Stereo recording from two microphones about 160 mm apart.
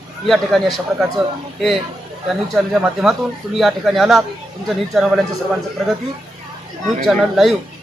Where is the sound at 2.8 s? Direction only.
5° right (ahead or behind).